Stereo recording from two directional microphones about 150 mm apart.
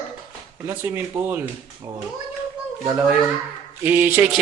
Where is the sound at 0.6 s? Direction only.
15° right (ahead or behind).